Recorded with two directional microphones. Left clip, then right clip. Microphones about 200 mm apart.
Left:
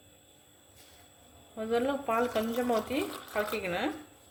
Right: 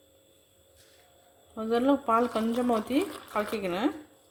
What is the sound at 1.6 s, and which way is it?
Speech, 50° right (ahead or behind).